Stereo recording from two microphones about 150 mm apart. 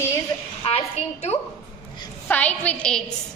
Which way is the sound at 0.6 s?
40° left (ahead or behind).